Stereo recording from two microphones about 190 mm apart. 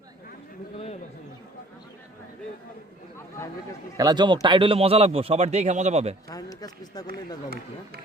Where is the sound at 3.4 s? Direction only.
15° left (ahead or behind).